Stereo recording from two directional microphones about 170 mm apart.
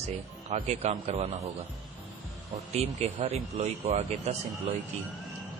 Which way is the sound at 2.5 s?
40° right (ahead or behind).